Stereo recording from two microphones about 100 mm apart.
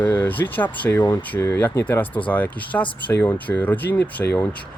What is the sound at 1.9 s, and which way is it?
Speech, 15° left (ahead or behind).